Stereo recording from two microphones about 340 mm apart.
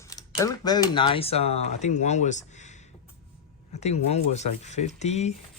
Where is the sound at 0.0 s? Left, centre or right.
Centre.